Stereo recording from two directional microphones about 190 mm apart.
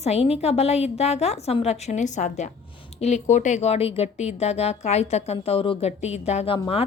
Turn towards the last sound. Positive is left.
turn(degrees=30)  # may be behind; listen again after turning